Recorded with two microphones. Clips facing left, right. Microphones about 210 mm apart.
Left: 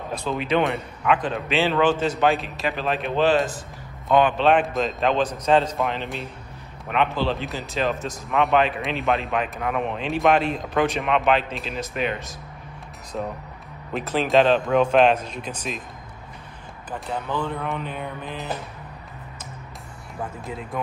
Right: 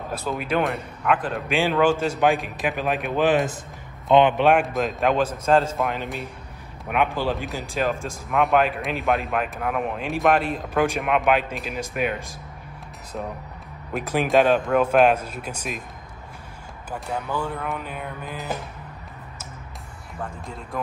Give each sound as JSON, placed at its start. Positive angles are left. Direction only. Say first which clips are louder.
{"t": 0.1, "sound": "a man's voice", "louder": "left 2 dB", "side_deg": -5}
{"t": 4.6, "sound": "a man's voice", "louder": "even", "side_deg": 0}
{"t": 17.0, "sound": "speech", "louder": "even", "side_deg": -5}
{"t": 20.7, "sound": "speech", "louder": "even", "side_deg": 0}